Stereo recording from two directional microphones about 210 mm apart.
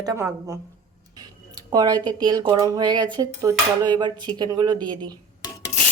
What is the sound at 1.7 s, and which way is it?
Speech, 20° right (ahead or behind).